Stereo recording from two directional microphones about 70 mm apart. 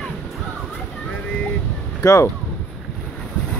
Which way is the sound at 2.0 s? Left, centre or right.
Left.